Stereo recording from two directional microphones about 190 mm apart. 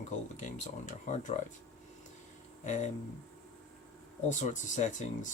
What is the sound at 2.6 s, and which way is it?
Speech, 40° left (ahead or behind).